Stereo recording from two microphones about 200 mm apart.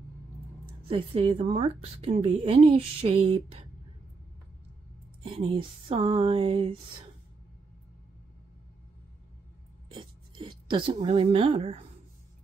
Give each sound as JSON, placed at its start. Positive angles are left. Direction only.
{"t": 0.8, "sound": "a woman's voice", "side_deg": -25}
{"t": 5.2, "sound": "a woman's voice", "side_deg": -25}
{"t": 9.8, "sound": "a sound", "side_deg": -25}